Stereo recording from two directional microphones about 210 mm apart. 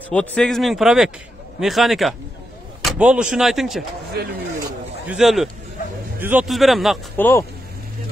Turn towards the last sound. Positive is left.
turn(degrees=10)  # may be behind; listen again after turning